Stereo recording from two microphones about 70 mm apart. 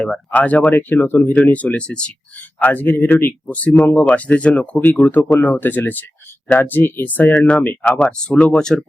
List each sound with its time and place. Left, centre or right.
0.0 s speech: centre
0.3 s speech: left